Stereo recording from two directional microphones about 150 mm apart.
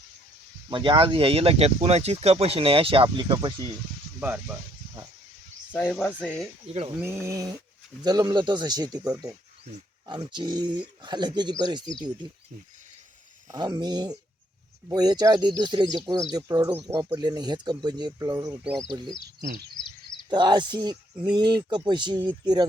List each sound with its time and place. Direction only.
0.7 s speech: 35° right (ahead or behind)
5.7 s speech: 10° left (ahead or behind)
7.0 s speech: 15° right (ahead or behind)
10.1 s speech: 30° right (ahead or behind)
13.5 s speech: 25° right (ahead or behind)
18.6 s speech: centre (ahead or behind)
19.4 s speech: 90° right
19.7 s a sound: 35° left (ahead or behind)
20.3 s speech: 30° right (ahead or behind)